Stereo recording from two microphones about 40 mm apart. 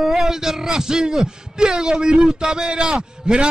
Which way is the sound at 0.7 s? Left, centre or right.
Centre.